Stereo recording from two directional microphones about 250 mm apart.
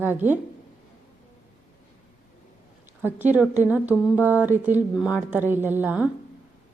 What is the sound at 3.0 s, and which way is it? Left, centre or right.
A woman's voice, centre.